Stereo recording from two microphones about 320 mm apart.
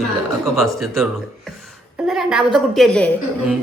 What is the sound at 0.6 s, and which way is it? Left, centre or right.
A woman's voice, centre.